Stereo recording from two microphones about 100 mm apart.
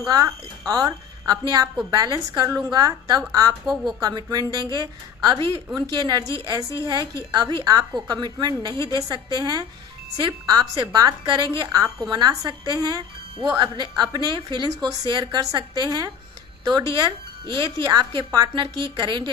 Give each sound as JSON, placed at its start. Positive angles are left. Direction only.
{"t": 0.1, "sound": "a woman's voice", "side_deg": -40}